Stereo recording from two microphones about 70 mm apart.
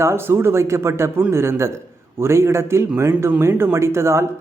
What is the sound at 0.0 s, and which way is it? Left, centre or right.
Speech, right.